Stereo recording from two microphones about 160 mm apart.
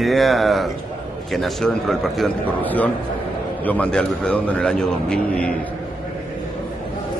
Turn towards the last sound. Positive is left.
turn(degrees=5)  # may be behind; listen again after turning